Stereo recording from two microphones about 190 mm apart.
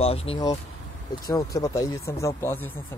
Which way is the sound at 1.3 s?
20° left (ahead or behind).